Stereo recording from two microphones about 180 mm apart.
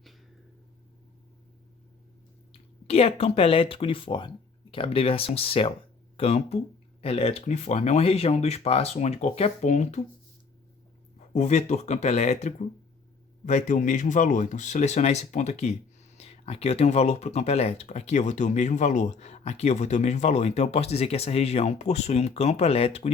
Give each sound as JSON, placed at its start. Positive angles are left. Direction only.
{"t": 2.5, "sound": "speech", "side_deg": 35}
{"t": 11.3, "sound": "speech", "side_deg": 40}